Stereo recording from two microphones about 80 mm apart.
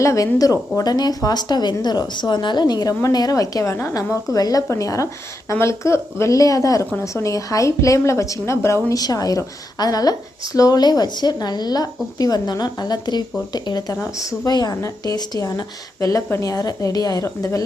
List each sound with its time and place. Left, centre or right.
0.0 s a woman's voice: left
0.8 s a woman's voice: left
9.0 s a woman's voice: left
13.9 s a woman's voice: left
14.5 s a woman's voice: left
17.2 s a woman's voice: left